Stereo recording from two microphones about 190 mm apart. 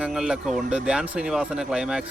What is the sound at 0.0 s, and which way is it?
Speech, 5° right (ahead or behind).